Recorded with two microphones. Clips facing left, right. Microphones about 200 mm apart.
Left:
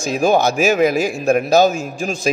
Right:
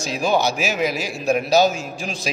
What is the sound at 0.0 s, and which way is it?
A man's voice, 50° left (ahead or behind).